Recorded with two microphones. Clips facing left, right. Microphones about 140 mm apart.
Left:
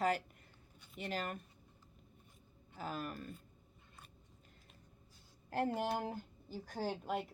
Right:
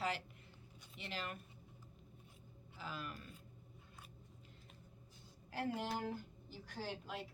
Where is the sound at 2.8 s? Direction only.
45° left (ahead or behind).